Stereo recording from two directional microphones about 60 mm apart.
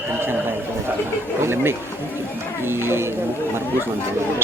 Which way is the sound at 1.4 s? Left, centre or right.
Right.